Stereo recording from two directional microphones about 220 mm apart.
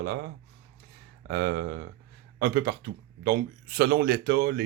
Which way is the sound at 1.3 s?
50° right (ahead or behind).